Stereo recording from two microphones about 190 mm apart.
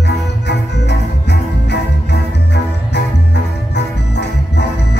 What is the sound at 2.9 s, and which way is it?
Organ, 60° left (ahead or behind).